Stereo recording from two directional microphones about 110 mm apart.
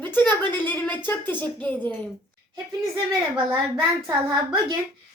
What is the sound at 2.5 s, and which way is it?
Speech, 35° right (ahead or behind).